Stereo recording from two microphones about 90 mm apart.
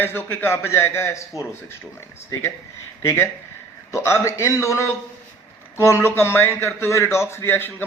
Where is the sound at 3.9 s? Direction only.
30° left (ahead or behind).